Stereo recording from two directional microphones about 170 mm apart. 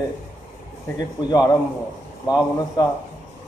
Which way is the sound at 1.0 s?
25° left (ahead or behind).